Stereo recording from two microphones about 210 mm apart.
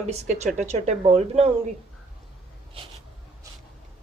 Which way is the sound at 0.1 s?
30° right (ahead or behind).